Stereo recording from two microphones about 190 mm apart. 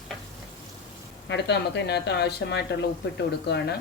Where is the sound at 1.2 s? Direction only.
65° left (ahead or behind).